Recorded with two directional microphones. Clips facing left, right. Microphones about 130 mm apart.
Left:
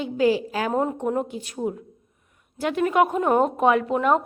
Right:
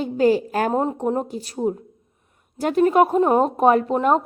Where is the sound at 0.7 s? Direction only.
30° right (ahead or behind).